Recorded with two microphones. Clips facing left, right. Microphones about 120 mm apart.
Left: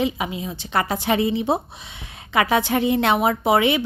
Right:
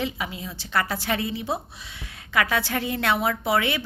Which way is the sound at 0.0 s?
20° left (ahead or behind).